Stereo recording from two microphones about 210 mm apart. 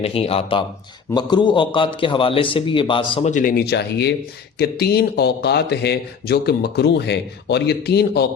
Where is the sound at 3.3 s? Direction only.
40° left (ahead or behind).